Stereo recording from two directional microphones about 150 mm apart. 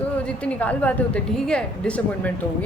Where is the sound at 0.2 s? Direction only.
10° left (ahead or behind).